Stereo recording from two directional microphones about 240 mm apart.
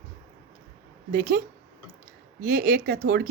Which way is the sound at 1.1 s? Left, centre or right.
Right.